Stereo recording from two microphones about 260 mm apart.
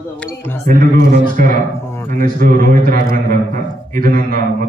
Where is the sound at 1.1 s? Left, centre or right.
Right.